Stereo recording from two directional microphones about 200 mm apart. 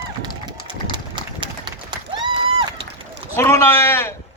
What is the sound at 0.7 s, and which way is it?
Pigeon, 25° right (ahead or behind).